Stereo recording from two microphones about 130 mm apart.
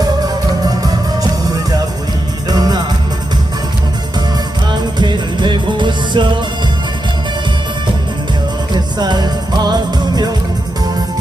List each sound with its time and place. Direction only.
0.6 s music: 30° right (ahead or behind)
4.9 s music: 35° right (ahead or behind)
8.7 s music: 35° right (ahead or behind)